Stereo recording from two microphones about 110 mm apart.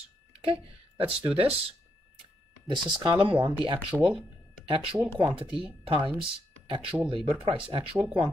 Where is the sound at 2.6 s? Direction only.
45° right (ahead or behind).